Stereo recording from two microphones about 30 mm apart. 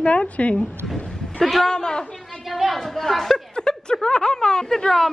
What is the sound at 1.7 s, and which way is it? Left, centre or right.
Speech, left.